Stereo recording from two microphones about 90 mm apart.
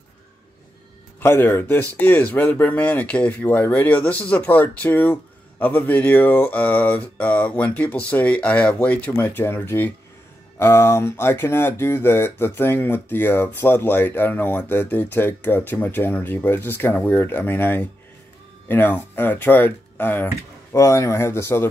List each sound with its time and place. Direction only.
1.2 s speech: 25° left (ahead or behind)